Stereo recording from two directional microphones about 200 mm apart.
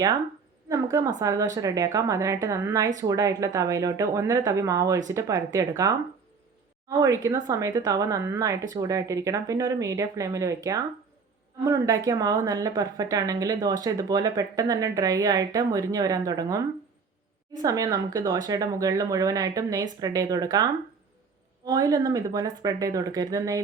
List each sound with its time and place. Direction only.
0.7 s a woman's voice: 15° right (ahead or behind)
7.0 s a woman's voice: 20° right (ahead or behind)